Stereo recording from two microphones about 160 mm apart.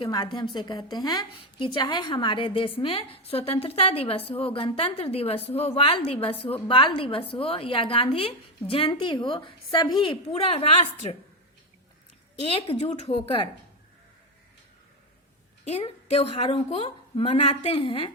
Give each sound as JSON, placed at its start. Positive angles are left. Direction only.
{"t": 0.0, "sound": "a woman's voice", "side_deg": 25}
{"t": 12.4, "sound": "a woman's voice", "side_deg": 35}
{"t": 15.8, "sound": "a woman's voice", "side_deg": 40}